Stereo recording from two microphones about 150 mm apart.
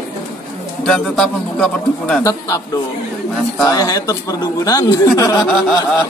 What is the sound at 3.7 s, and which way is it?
Speech, 25° left (ahead or behind).